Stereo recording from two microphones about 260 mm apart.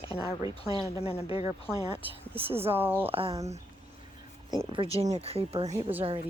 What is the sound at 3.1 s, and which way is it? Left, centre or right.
Speech, right.